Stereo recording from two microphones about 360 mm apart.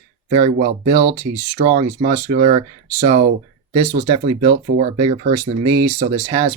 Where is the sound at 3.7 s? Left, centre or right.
Centre.